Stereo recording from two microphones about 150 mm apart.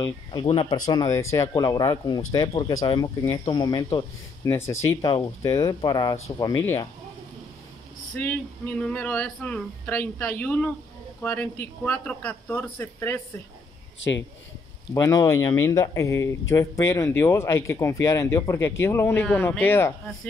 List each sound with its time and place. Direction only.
0.0 s speech: 30° left (ahead or behind)
8.2 s speech: 10° left (ahead or behind)
15.0 s speech: 20° left (ahead or behind)